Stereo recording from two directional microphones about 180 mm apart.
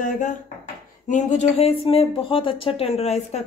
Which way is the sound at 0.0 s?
45° left (ahead or behind).